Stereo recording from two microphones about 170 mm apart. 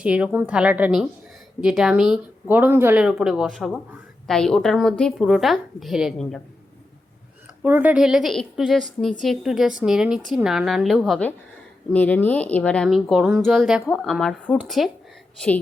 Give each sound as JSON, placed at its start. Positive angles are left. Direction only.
{"t": 0.0, "sound": "a woman's voice", "side_deg": -5}
{"t": 7.6, "sound": "a woman's voice", "side_deg": -10}